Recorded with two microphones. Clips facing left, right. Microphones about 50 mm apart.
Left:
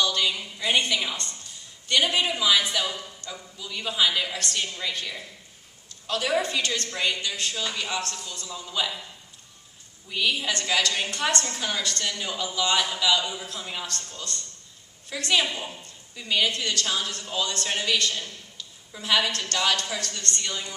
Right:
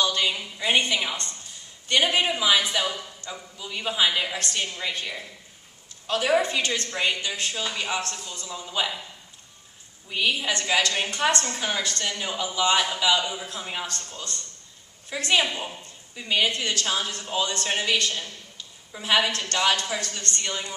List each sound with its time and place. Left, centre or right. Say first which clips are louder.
0.0 s a sound: right 1 dB; right
0.4 s a woman's voice: right 1 dB; centre
10.0 s a man's voice: right 1 dB; centre
19.1 s a man's voice: right 2 dB; right